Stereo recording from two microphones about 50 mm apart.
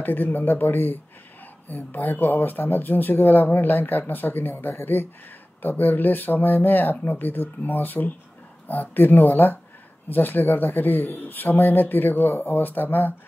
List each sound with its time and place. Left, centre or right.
0.0 s speech: left